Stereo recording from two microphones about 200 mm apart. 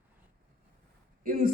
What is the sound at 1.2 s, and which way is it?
Speech, 45° right (ahead or behind).